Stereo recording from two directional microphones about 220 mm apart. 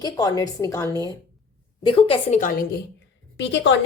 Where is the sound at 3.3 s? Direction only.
55° left (ahead or behind).